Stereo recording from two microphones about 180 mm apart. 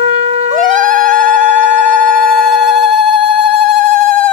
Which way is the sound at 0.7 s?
45° right (ahead or behind).